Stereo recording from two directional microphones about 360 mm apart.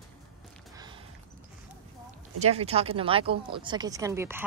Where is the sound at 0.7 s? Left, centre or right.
Centre.